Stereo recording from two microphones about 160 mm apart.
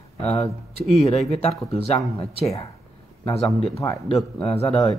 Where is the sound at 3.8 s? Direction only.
20° left (ahead or behind).